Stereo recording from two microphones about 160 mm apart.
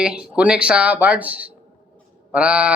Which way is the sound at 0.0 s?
5° right (ahead or behind).